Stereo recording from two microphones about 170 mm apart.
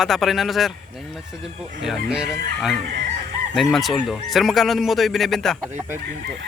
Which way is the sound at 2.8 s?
75° right (ahead or behind).